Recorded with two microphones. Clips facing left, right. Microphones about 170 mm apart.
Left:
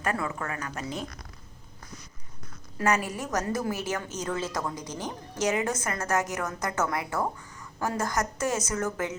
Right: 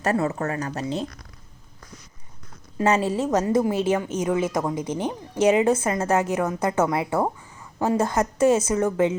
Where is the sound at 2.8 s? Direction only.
25° right (ahead or behind).